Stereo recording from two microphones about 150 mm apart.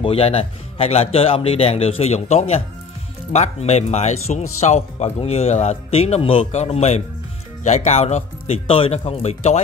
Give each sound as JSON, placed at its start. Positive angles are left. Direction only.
{"t": 0.0, "sound": "speech", "side_deg": 40}